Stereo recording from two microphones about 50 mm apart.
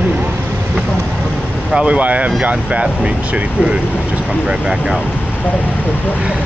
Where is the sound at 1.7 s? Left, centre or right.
Right.